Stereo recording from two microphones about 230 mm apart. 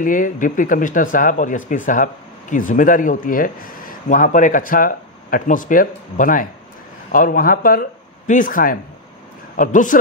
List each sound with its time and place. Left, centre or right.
0.0 s speech: left